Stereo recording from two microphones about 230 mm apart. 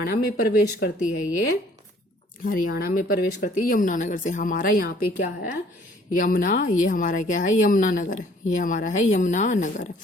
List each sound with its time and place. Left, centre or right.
0.3 s speech: left
2.4 s speech: left